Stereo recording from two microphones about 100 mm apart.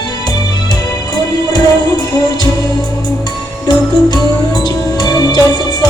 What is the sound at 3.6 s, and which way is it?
Music, 45° left (ahead or behind).